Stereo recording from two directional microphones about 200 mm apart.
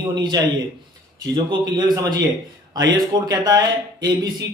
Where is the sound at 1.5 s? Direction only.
20° right (ahead or behind).